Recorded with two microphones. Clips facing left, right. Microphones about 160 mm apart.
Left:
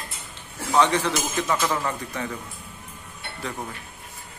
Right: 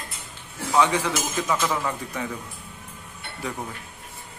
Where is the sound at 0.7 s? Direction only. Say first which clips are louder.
Left 1 dB; 10° right (ahead or behind).